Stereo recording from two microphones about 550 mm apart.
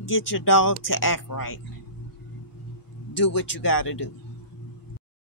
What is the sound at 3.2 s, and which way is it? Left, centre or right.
Speech, left.